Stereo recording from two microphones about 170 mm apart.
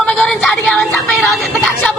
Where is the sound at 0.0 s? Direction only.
5° left (ahead or behind).